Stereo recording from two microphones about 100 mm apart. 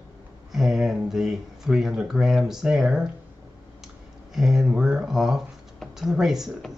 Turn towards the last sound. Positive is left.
turn(degrees=-5)  # may be behind; listen again after turning